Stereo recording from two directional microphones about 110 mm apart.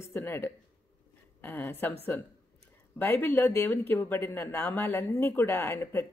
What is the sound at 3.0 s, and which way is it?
Speech, 20° left (ahead or behind).